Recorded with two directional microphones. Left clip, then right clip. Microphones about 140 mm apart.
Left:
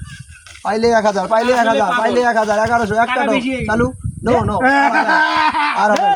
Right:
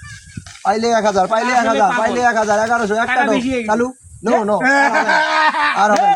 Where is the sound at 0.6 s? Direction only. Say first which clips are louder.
Left 1 dB; 15° right (ahead or behind).